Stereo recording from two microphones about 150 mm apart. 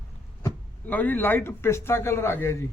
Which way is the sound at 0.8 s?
10° left (ahead or behind).